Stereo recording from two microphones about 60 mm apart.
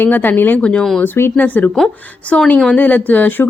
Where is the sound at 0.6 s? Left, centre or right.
Centre.